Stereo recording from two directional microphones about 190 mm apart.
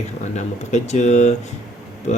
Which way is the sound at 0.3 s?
35° left (ahead or behind).